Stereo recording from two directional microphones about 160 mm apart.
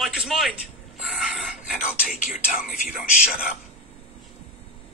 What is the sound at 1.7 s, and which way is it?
Speech, 55° left (ahead or behind).